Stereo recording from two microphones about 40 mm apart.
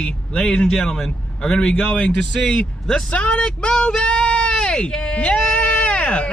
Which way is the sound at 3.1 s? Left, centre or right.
Left.